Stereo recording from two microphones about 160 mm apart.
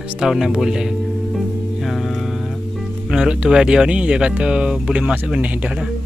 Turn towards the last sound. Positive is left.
turn(degrees=-10)  # may be behind; listen again after turning